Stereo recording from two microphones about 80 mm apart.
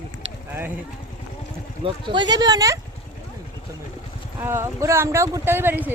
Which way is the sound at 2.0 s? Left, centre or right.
Right.